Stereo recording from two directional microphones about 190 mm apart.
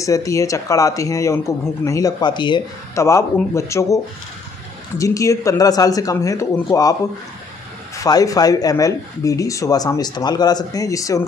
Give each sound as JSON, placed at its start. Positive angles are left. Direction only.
{"t": 0.0, "sound": "speech", "side_deg": 15}
{"t": 8.0, "sound": "speech", "side_deg": 20}